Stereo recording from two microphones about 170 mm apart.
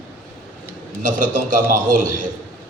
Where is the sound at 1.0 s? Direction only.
50° right (ahead or behind).